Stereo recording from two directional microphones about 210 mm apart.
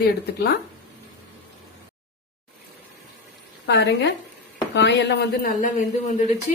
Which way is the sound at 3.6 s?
55° left (ahead or behind).